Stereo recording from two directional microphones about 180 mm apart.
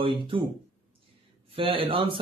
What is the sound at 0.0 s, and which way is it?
Speech, 30° right (ahead or behind).